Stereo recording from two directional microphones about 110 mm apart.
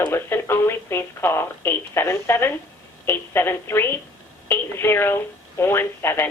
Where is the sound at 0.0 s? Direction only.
20° left (ahead or behind).